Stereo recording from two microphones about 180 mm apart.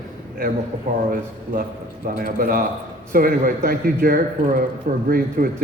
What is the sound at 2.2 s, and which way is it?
A man's voice, 55° right (ahead or behind).